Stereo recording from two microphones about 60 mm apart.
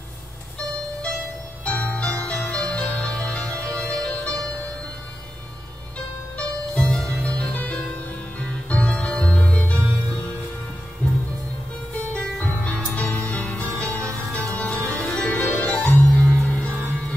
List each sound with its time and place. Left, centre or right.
1.6 s music: left
6.3 s music: centre
11.0 s music: left
15.2 s music: left
15.6 s music: centre